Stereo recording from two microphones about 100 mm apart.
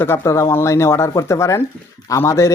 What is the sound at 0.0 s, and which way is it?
A man's voice, 25° left (ahead or behind).